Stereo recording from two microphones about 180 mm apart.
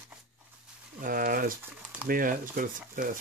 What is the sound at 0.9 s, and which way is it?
Speech, 50° right (ahead or behind).